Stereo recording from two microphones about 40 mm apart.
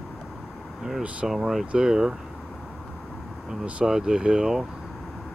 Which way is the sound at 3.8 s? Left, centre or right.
Centre.